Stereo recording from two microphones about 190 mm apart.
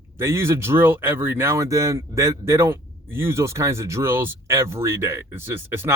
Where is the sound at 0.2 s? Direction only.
15° right (ahead or behind).